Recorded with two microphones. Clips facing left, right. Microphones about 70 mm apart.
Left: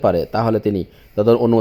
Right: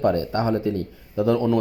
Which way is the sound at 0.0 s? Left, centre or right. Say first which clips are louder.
Left 5 dB; left.